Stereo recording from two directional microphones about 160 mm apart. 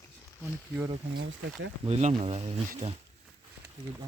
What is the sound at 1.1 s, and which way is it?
Speech, 90° right.